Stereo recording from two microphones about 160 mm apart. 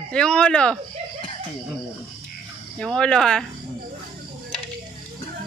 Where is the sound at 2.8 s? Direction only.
5° left (ahead or behind).